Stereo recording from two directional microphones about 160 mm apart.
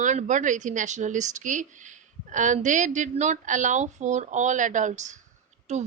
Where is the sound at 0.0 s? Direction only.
50° right (ahead or behind).